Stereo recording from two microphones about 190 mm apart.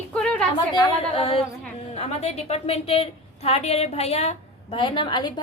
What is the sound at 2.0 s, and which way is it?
A woman's voice, 35° left (ahead or behind).